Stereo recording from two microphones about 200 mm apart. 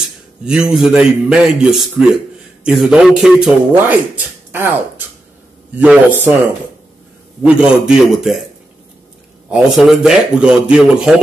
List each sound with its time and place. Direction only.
0.5 s a man's voice: 5° right (ahead or behind)
7.4 s a man's voice: centre (ahead or behind)
9.5 s a man's voice: 5° right (ahead or behind)